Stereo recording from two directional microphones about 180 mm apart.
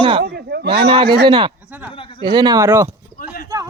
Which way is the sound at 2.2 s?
25° right (ahead or behind).